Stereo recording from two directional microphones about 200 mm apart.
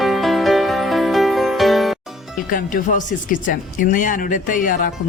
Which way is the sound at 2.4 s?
40° left (ahead or behind).